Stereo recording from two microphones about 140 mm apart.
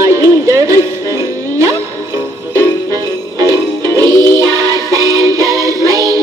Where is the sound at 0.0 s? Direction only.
20° right (ahead or behind).